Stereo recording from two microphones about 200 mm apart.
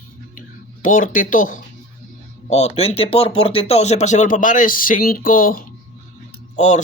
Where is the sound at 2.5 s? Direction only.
30° left (ahead or behind).